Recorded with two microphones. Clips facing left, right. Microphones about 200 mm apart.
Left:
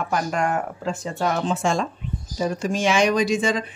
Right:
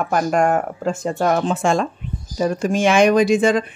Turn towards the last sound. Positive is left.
turn(degrees=-55)  # may be behind; listen again after turning